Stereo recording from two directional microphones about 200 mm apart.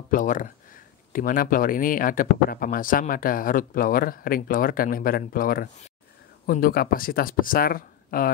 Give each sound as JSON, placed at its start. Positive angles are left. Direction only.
{"t": 0.1, "sound": "speech", "side_deg": 40}